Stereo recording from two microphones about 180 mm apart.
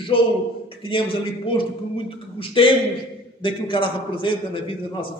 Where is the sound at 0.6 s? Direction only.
30° left (ahead or behind).